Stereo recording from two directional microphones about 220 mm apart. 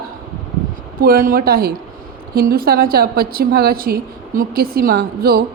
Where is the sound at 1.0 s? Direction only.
40° right (ahead or behind).